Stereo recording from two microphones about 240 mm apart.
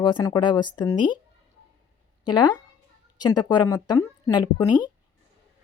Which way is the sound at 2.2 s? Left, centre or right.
Centre.